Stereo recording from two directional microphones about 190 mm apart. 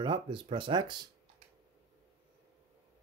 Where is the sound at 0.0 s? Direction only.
25° right (ahead or behind).